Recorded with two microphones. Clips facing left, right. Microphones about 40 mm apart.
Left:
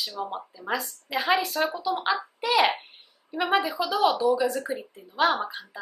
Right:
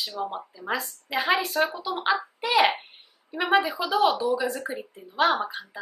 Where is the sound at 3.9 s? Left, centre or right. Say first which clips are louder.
Even; centre.